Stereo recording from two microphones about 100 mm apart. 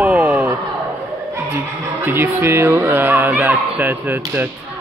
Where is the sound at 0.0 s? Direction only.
20° right (ahead or behind).